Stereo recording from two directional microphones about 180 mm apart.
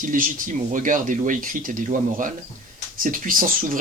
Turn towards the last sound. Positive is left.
turn(degrees=-50)  # may be behind; listen again after turning